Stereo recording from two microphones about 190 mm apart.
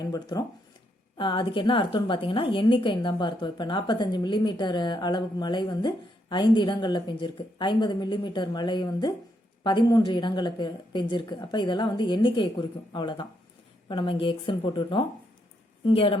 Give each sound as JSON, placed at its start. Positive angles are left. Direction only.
{"t": 0.0, "sound": "a woman's voice", "side_deg": 20}